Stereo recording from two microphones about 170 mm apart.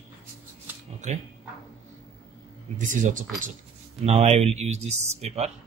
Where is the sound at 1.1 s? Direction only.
45° right (ahead or behind).